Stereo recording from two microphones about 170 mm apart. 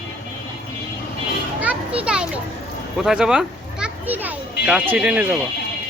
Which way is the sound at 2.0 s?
5° right (ahead or behind).